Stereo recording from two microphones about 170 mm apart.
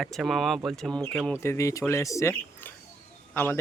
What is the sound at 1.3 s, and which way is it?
Speech, 15° left (ahead or behind).